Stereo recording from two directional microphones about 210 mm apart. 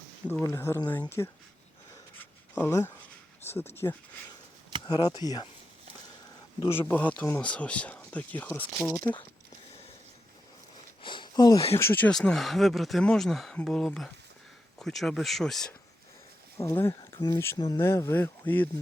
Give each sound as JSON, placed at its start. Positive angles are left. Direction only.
{"t": 0.4, "sound": "speech", "side_deg": 10}
{"t": 2.1, "sound": "a sound", "side_deg": 10}
{"t": 4.9, "sound": "speech", "side_deg": 20}
{"t": 6.6, "sound": "speech", "side_deg": 10}
{"t": 11.0, "sound": "speech", "side_deg": 20}
{"t": 16.6, "sound": "speech", "side_deg": 10}